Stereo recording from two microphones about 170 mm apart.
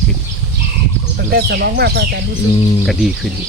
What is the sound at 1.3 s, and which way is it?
Speech, 70° right (ahead or behind).